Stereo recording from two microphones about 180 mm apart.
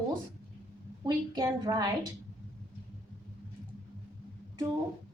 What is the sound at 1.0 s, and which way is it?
Speech, 25° right (ahead or behind).